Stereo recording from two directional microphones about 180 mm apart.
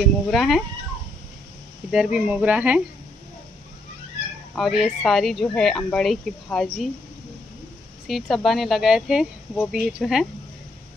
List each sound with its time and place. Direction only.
0.3 s speech: centre (ahead or behind)
1.9 s speech: 5° right (ahead or behind)
4.6 s speech: centre (ahead or behind)
8.1 s speech: centre (ahead or behind)